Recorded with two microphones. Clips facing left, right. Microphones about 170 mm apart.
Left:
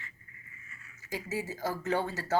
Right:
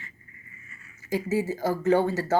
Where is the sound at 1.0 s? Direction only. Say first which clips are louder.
Right 10 dB; 35° right (ahead or behind).